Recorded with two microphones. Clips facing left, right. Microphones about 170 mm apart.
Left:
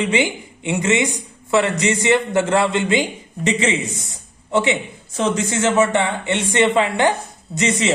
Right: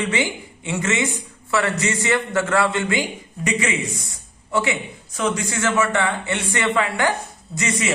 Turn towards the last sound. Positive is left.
turn(degrees=25)  # may be behind; listen again after turning